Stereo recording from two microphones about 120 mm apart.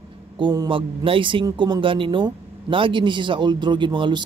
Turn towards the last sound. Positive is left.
turn(degrees=-40)  # may be behind; listen again after turning